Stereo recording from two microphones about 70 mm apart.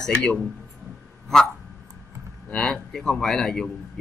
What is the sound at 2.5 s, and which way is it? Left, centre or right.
Speech, centre.